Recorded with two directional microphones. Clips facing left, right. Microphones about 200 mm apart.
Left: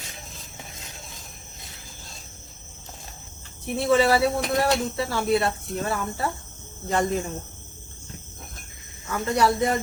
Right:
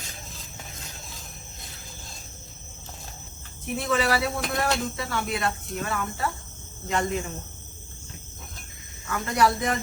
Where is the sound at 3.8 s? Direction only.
30° left (ahead or behind).